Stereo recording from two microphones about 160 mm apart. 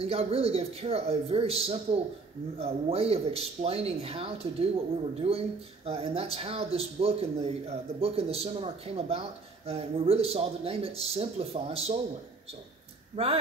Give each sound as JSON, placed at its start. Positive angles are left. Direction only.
{"t": 0.0, "sound": "speech", "side_deg": -40}
{"t": 13.1, "sound": "speech", "side_deg": -40}